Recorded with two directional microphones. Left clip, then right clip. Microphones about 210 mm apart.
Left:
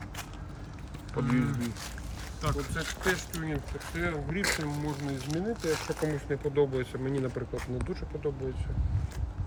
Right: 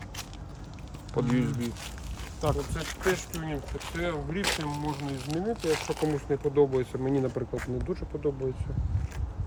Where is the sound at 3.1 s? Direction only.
25° right (ahead or behind).